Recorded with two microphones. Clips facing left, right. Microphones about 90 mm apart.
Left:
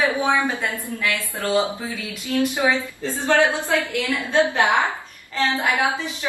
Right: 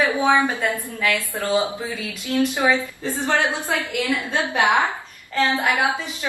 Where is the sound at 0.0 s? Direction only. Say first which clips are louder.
Right 2 dB; 20° right (ahead or behind).